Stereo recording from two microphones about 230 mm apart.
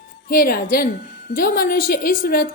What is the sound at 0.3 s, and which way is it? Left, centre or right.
A woman's voice, left.